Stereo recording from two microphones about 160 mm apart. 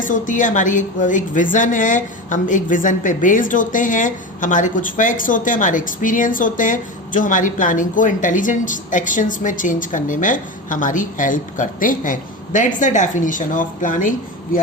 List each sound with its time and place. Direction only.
0.0 s a woman's voice: 55° left (ahead or behind)